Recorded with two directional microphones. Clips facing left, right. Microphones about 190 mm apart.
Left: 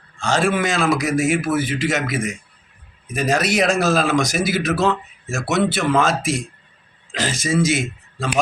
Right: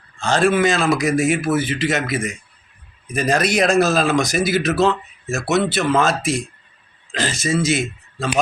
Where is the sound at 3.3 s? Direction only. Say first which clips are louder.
Right 1 dB; 5° left (ahead or behind).